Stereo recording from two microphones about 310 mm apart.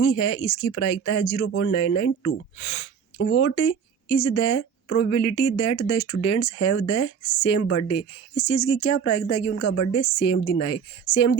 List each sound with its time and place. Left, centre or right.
0.0 s speech: left
3.2 s speech: left
3.4 s speech: left